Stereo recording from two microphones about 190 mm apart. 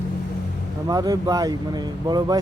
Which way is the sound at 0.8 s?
20° right (ahead or behind).